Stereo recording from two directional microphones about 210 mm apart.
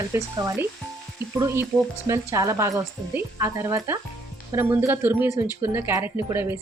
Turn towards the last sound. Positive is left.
turn(degrees=-10)  # may be behind; listen again after turning